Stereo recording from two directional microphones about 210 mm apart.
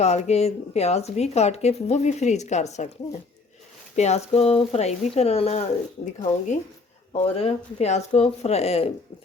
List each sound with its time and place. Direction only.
0.0 s speech: 30° left (ahead or behind)
7.1 s speech: 25° left (ahead or behind)